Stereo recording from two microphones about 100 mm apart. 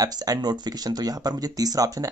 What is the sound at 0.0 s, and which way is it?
Speech, 40° right (ahead or behind).